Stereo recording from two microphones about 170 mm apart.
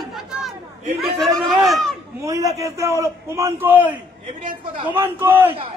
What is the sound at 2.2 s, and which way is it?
A man's voice, 15° right (ahead or behind).